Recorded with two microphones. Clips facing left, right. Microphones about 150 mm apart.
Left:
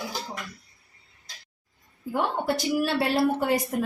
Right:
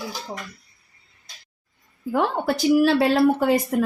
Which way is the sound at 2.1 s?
85° right.